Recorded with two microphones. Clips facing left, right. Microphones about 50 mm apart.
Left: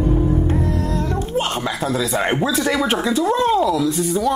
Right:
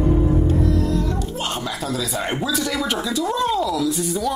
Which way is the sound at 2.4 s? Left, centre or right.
Left.